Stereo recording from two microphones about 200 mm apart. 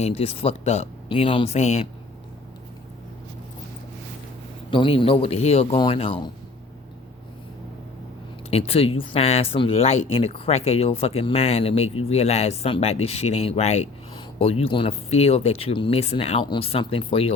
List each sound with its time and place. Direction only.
0.0 s speech: 30° left (ahead or behind)
4.7 s speech: 25° left (ahead or behind)
8.4 s speech: 30° left (ahead or behind)